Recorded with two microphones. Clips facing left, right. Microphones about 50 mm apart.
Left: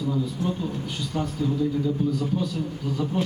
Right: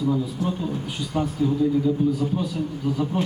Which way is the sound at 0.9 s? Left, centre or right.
Centre.